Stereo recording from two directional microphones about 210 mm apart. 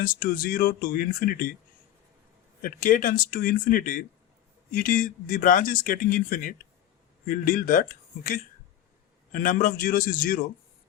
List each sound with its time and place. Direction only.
0.0 s speech: 40° left (ahead or behind)
2.6 s speech: 40° left (ahead or behind)